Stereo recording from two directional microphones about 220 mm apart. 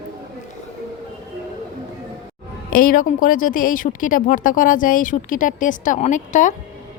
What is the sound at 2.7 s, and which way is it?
Speech, 40° left (ahead or behind).